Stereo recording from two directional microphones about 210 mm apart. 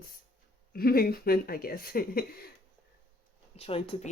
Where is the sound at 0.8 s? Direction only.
45° left (ahead or behind).